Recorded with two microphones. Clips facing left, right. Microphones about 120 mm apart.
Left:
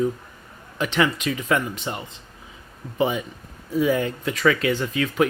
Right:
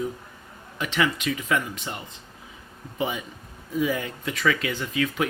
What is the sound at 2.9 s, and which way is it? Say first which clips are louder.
Speech: left 6 dB; 35° left (ahead or behind).